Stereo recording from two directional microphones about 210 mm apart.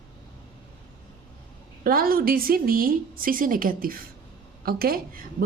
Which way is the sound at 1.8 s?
45° right (ahead or behind).